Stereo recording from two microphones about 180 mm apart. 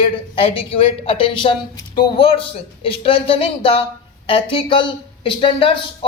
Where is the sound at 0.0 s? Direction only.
30° left (ahead or behind).